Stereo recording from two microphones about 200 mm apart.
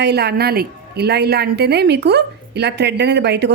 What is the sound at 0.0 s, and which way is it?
A woman's voice, 55° right (ahead or behind).